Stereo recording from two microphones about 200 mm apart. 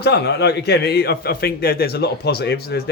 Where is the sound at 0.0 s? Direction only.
55° left (ahead or behind).